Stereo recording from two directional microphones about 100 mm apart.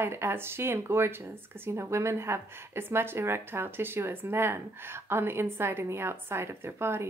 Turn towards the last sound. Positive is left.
turn(degrees=-25)  # may be behind; listen again after turning